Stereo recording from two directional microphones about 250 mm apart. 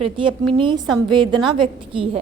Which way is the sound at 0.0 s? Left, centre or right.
Right.